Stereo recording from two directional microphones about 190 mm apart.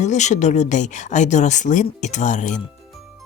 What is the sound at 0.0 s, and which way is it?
Speech, 40° left (ahead or behind).